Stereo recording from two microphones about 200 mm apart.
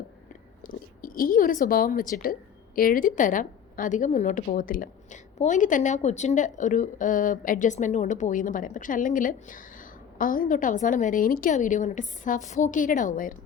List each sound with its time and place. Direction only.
0.6 s a woman's voice: 45° left (ahead or behind)